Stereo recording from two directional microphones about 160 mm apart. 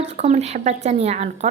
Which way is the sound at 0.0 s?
45° right (ahead or behind).